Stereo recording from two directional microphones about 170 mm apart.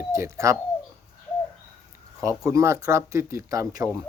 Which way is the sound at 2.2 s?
20° right (ahead or behind).